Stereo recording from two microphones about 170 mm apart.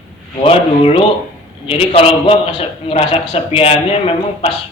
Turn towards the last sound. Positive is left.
turn(degrees=35)  # may be behind; listen again after turning